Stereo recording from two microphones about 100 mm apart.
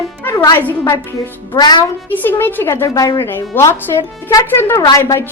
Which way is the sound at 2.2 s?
20° left (ahead or behind).